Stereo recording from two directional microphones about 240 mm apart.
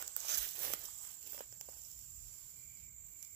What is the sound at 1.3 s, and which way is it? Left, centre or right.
Walk, right.